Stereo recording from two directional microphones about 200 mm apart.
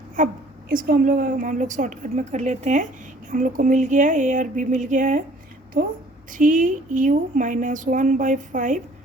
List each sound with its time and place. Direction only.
0.2 s a woman's voice: 40° right (ahead or behind)
5.7 s a woman's voice: 55° right (ahead or behind)
6.3 s a woman's voice: 40° right (ahead or behind)